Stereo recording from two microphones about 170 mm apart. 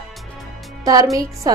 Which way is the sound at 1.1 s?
20° right (ahead or behind).